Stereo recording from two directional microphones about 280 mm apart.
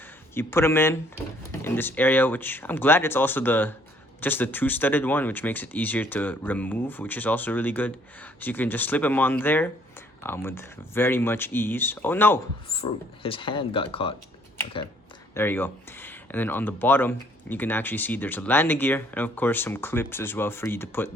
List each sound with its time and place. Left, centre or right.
0.3 s speech: centre
12.6 s speech: centre
15.4 s speech: centre